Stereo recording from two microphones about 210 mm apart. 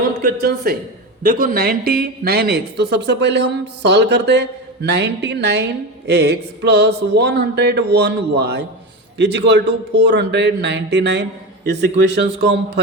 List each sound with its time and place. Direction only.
0.4 s a woman's voice: 45° right (ahead or behind)